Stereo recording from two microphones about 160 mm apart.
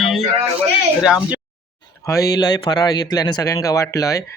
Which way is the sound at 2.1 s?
20° left (ahead or behind).